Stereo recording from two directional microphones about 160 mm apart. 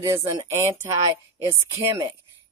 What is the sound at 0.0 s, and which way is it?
Speech, 15° right (ahead or behind).